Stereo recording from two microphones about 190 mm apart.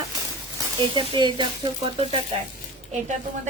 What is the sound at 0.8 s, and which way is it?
Speech, 25° right (ahead or behind).